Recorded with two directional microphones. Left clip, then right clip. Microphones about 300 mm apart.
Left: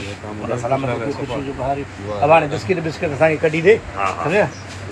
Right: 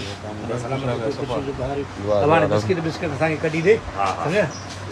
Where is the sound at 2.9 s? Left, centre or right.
Centre.